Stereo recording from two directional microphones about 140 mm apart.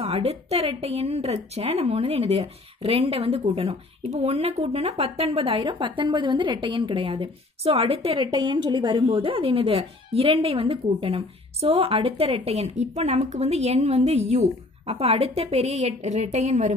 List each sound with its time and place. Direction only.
0.0 s a woman's voice: 45° right (ahead or behind)